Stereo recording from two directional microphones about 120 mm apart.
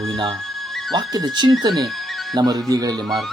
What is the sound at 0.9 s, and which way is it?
Speech, 35° right (ahead or behind).